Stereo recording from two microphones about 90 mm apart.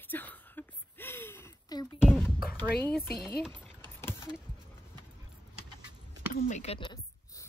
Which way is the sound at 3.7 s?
25° left (ahead or behind).